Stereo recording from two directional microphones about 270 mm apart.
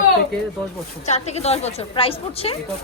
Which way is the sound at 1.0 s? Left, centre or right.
Left.